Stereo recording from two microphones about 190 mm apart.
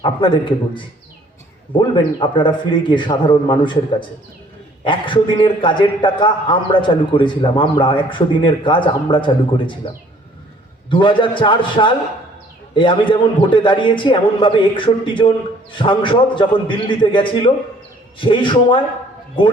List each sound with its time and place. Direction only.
0.0 s a man's voice: 25° left (ahead or behind)
4.8 s a man's voice: 25° left (ahead or behind)
10.8 s a man's voice: 25° left (ahead or behind)